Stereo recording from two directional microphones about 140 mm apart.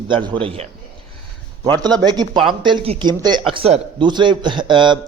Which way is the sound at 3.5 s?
40° right (ahead or behind).